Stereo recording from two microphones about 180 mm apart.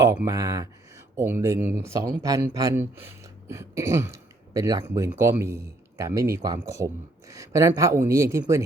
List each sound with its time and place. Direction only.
0.0 s speech: 15° right (ahead or behind)